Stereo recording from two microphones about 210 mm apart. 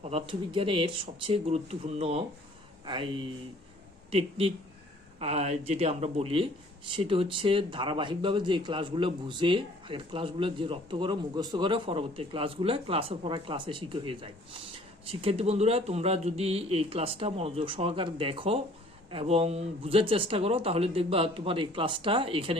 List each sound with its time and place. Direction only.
0.0 s speech: 25° right (ahead or behind)